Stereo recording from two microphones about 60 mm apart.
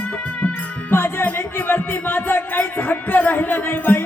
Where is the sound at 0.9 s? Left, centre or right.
Left.